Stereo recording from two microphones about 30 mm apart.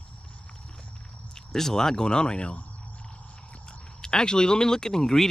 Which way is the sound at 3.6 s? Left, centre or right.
Left.